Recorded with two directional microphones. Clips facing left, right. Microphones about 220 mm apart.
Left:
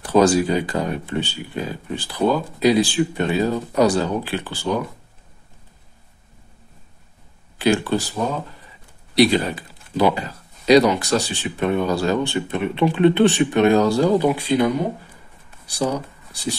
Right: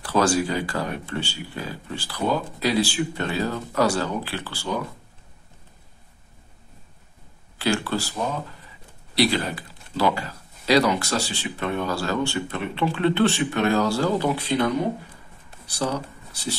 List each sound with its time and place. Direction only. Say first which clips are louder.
0.0 s speech: left 6 dB; 20° left (ahead or behind)
7.5 s speech: left 5 dB; 15° left (ahead or behind)
9.1 s speech: left 6 dB; 20° left (ahead or behind)